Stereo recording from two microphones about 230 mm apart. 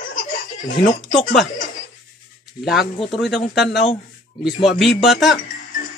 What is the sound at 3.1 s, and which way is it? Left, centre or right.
Speech, centre.